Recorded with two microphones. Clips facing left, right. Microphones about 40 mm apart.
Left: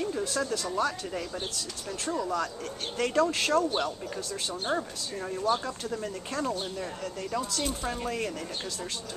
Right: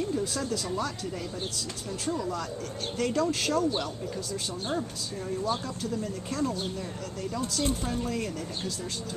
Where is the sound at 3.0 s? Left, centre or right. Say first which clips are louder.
Left 2 dB; left.